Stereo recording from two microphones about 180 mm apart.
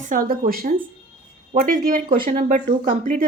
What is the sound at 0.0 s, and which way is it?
A woman's voice, 50° right (ahead or behind).